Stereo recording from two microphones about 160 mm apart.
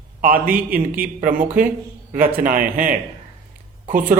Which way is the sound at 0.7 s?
60° right (ahead or behind).